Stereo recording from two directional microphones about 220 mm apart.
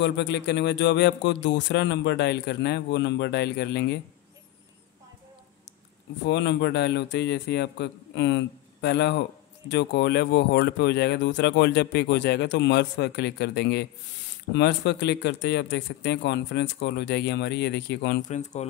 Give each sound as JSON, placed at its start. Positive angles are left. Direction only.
{"t": 0.0, "sound": "speech", "side_deg": 50}
{"t": 6.2, "sound": "speech", "side_deg": 50}
{"t": 18.3, "sound": "speech", "side_deg": 30}